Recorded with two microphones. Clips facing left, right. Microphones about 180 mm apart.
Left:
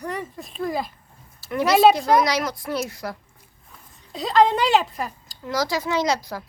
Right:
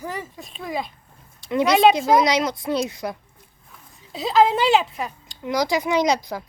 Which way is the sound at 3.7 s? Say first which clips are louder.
Right 1 dB; 5° right (ahead or behind).